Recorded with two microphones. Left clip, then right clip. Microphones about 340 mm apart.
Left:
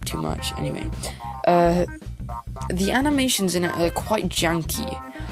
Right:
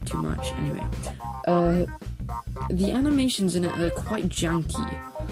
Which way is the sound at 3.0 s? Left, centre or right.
Centre.